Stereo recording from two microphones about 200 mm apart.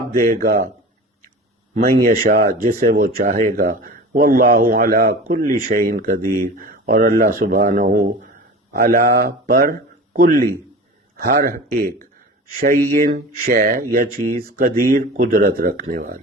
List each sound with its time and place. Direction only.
0.1 s speech: 45° right (ahead or behind)
1.7 s speech: 45° right (ahead or behind)